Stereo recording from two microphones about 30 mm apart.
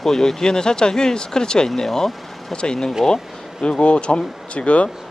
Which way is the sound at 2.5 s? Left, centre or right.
Left.